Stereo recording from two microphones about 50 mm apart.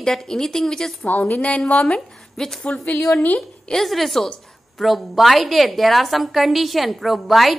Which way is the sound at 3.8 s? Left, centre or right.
Centre.